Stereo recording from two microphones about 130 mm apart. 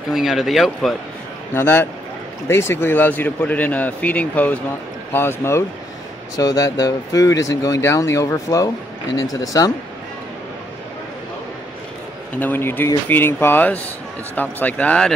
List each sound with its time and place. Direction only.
0.1 s speech: centre (ahead or behind)
1.5 s speech: 15° left (ahead or behind)
12.4 s speech: 15° left (ahead or behind)